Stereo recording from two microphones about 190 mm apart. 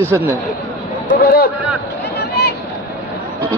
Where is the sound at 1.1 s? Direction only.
55° left (ahead or behind).